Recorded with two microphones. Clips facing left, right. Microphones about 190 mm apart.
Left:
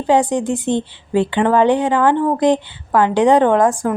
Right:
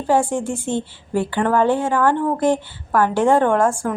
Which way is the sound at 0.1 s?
20° left (ahead or behind).